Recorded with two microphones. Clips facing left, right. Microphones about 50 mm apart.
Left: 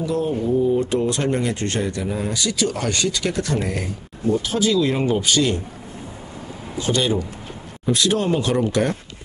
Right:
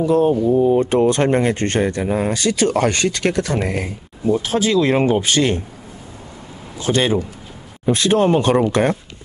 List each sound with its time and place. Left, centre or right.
0.0 s speech: right
3.6 s speech: right
6.9 s speech: right